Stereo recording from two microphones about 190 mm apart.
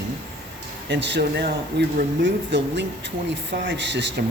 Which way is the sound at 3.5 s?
65° right (ahead or behind).